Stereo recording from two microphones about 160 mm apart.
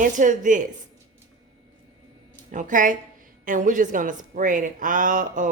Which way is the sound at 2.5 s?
55° right (ahead or behind).